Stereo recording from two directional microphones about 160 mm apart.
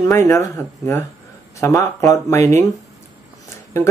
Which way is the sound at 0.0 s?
20° left (ahead or behind).